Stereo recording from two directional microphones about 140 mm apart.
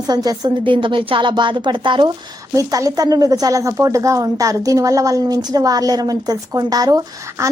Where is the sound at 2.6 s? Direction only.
25° right (ahead or behind).